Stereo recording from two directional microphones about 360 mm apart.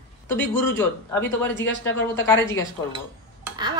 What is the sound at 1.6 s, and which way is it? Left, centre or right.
Speech, left.